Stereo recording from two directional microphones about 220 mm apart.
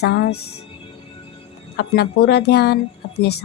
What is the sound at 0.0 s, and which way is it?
Speech, 45° left (ahead or behind).